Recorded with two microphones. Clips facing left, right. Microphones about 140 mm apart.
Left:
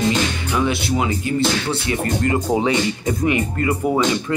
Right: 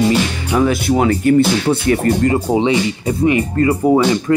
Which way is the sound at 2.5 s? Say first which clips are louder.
Right 4 dB; 25° right (ahead or behind).